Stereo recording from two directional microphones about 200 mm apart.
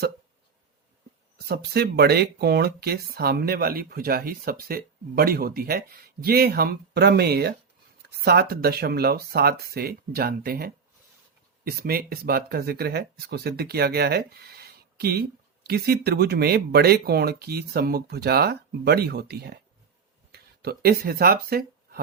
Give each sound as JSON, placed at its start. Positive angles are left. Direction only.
{"t": 1.5, "sound": "speech", "side_deg": -55}